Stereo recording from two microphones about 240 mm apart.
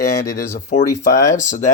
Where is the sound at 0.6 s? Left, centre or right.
Left.